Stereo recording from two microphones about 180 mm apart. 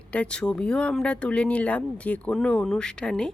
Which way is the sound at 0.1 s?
5° left (ahead or behind).